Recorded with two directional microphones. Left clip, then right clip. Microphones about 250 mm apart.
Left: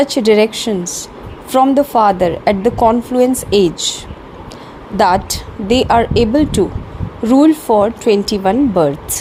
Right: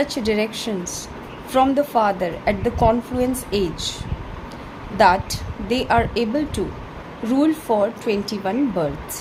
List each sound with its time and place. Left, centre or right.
0.0 s a woman's voice: left
4.9 s a woman's voice: left